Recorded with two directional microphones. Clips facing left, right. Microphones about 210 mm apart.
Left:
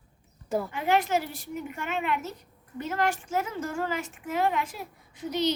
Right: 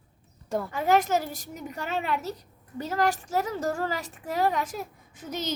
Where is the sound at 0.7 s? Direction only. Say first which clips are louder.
Right 3 dB; 40° right (ahead or behind).